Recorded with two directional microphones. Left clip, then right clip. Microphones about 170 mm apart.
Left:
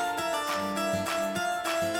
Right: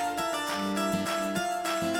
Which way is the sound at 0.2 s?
Centre (ahead or behind).